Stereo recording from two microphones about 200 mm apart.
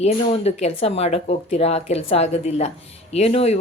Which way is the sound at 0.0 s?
35° left (ahead or behind).